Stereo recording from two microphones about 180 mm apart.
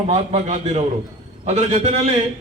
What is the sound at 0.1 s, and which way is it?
A man's voice, 35° right (ahead or behind).